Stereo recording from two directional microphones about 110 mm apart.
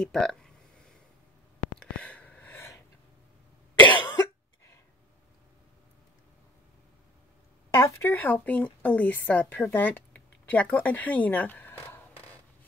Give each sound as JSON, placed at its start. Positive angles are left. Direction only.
{"t": 0.0, "sound": "a sound", "side_deg": 5}
{"t": 3.8, "sound": "cough", "side_deg": 45}
{"t": 7.7, "sound": "a woman's voice", "side_deg": 25}